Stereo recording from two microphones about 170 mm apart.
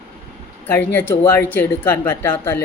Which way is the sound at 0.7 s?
10° left (ahead or behind).